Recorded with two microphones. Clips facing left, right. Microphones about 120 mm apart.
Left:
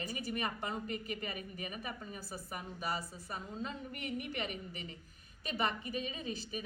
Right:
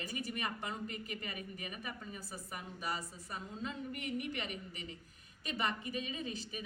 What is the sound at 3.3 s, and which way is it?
A woman's voice, 40° left (ahead or behind).